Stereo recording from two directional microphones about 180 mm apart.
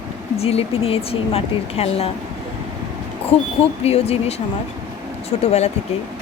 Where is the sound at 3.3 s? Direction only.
35° left (ahead or behind).